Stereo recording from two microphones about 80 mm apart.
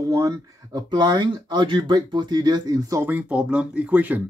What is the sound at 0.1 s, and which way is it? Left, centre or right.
Speech, right.